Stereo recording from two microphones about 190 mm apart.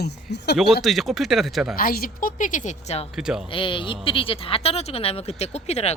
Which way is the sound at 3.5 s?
25° left (ahead or behind).